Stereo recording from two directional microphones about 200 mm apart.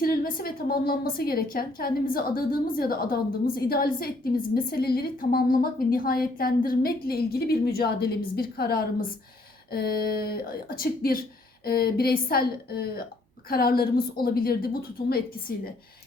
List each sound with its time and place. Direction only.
0.0 s a woman's voice: 50° left (ahead or behind)